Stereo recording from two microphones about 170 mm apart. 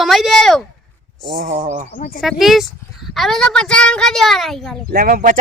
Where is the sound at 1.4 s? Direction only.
50° right (ahead or behind).